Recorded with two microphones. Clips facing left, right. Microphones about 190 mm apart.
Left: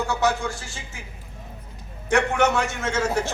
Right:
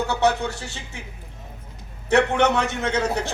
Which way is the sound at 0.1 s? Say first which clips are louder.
Right 2 dB; 65° right (ahead or behind).